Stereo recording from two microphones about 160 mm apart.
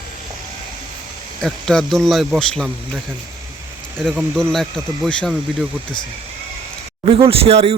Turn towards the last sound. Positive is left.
turn(degrees=-40)  # may be behind; listen again after turning